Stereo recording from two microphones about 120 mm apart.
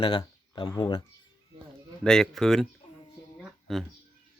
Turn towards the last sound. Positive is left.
turn(degrees=0)  # may be behind; listen again after turning